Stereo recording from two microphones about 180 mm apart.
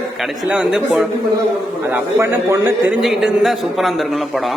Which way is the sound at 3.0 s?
Centre (ahead or behind).